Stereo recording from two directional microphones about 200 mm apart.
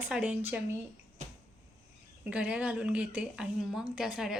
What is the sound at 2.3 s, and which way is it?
A woman's voice, 5° right (ahead or behind).